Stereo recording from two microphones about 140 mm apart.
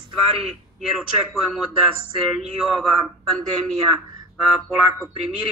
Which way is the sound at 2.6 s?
Centre (ahead or behind).